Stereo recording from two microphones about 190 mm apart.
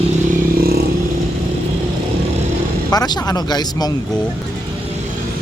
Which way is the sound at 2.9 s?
20° left (ahead or behind).